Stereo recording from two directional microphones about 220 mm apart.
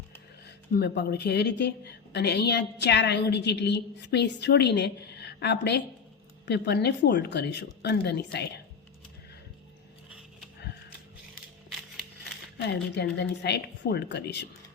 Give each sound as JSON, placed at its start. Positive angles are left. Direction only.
{"t": 0.7, "sound": "a woman's voice", "side_deg": 50}
{"t": 12.5, "sound": "a woman's voice", "side_deg": 50}